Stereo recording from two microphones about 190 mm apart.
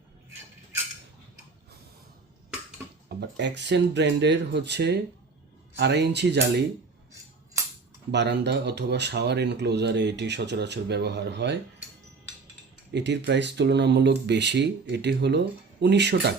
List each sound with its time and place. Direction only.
3.1 s speech: 65° right (ahead or behind)
8.1 s speech: 65° right (ahead or behind)
12.9 s speech: 65° right (ahead or behind)